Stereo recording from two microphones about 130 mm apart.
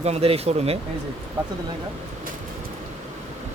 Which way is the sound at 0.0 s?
50° right (ahead or behind).